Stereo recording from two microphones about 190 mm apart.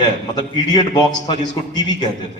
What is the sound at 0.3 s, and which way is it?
A man's voice, 20° left (ahead or behind).